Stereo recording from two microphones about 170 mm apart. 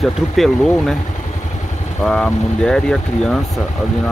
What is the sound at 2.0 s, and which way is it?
Speech, 5° left (ahead or behind).